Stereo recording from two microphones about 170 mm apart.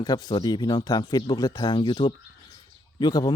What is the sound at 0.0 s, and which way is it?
Speech, 25° left (ahead or behind).